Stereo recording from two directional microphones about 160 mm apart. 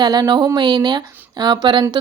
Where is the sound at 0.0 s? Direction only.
25° right (ahead or behind).